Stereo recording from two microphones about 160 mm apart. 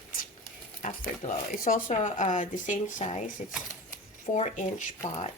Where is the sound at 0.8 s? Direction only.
50° left (ahead or behind).